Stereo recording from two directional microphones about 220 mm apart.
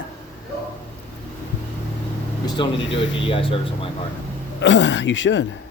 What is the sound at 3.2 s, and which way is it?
Speech, 25° left (ahead or behind).